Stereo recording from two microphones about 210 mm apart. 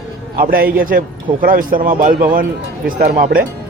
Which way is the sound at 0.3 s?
45° right (ahead or behind).